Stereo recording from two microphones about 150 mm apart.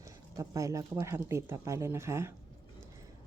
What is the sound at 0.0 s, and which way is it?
Speech, 20° right (ahead or behind).